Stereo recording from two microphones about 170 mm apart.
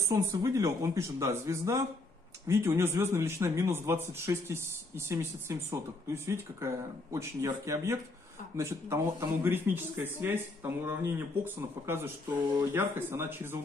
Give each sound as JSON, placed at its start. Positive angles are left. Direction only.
{"t": 0.3, "sound": "speech", "side_deg": -20}